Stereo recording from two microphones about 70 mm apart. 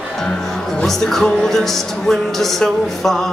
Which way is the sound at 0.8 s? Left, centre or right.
Centre.